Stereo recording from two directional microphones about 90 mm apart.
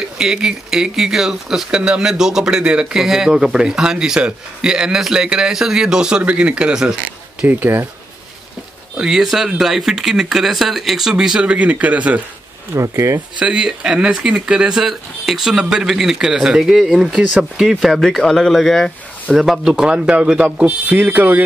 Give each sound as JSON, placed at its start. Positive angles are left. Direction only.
{"t": 0.2, "sound": "speech", "side_deg": -5}
{"t": 7.4, "sound": "speech", "side_deg": -20}
{"t": 8.9, "sound": "speech", "side_deg": -5}
{"t": 12.7, "sound": "speech", "side_deg": -35}
{"t": 13.4, "sound": "speech", "side_deg": -10}